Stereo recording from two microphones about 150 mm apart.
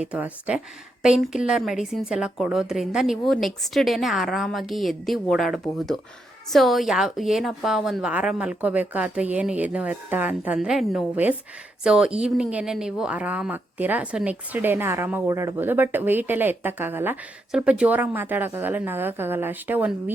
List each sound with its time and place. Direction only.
0.0 s a woman's voice: 10° right (ahead or behind)